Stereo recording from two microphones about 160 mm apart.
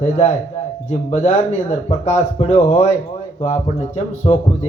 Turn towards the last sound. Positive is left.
turn(degrees=45)  # may be behind; listen again after turning